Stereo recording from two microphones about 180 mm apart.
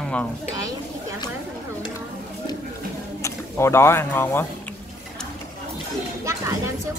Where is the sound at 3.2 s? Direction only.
15° left (ahead or behind).